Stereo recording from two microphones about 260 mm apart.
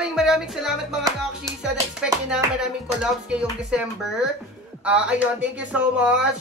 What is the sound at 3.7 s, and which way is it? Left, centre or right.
A child's voice, centre.